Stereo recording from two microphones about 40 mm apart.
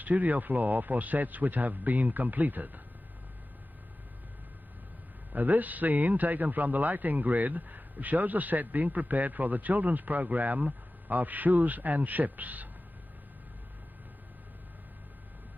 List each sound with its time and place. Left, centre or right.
0.0 s a man's voice: right
5.3 s a man's voice: right